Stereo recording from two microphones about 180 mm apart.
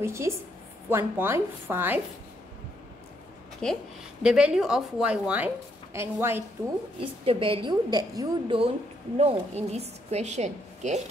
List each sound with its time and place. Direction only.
0.0 s speech: 15° right (ahead or behind)
3.6 s speech: 5° left (ahead or behind); by 6.4 s 15° right (ahead or behind)
7.0 s a woman's voice: 30° right (ahead or behind)
9.2 s a woman's voice: 35° right (ahead or behind)